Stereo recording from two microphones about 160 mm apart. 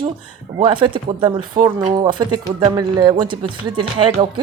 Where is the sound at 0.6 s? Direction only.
30° right (ahead or behind).